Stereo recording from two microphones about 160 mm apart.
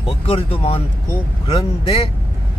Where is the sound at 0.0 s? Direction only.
40° left (ahead or behind).